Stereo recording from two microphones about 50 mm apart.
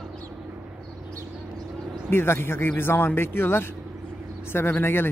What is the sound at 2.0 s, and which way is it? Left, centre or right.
Speech, left.